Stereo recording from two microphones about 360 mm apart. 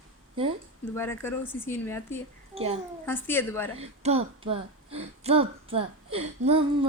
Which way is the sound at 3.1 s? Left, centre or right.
Centre.